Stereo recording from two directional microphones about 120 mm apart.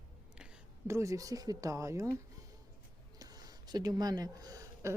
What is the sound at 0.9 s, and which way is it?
Speech, 25° right (ahead or behind).